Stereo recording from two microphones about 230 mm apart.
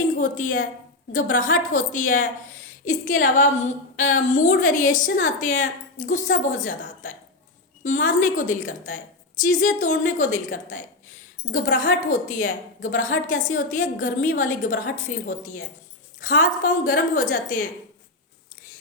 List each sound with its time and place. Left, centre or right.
0.2 s a woman's voice: left